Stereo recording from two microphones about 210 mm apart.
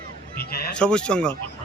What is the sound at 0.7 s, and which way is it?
Speech, 5° left (ahead or behind).